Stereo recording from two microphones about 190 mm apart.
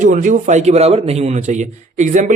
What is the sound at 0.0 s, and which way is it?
A man's voice, 40° right (ahead or behind).